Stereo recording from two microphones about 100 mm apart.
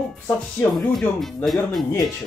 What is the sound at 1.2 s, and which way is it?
Speech, centre (ahead or behind).